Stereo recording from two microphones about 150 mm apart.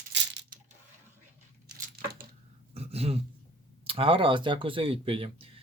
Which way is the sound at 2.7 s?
40° right (ahead or behind).